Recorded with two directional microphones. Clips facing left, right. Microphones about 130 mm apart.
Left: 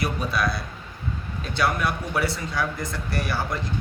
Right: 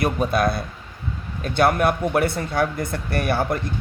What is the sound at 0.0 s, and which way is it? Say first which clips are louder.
A man's voice: right 6 dB; 50° right (ahead or behind).